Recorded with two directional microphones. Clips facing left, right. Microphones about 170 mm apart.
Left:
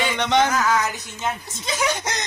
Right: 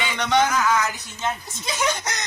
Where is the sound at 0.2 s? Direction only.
20° left (ahead or behind).